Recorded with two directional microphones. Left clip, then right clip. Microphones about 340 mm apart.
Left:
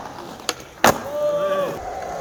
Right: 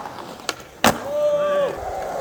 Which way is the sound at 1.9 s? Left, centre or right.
Centre.